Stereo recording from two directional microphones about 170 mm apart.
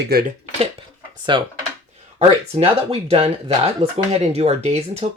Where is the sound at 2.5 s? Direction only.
35° right (ahead or behind).